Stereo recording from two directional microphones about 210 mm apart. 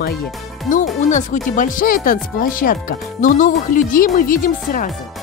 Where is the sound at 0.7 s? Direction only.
35° left (ahead or behind).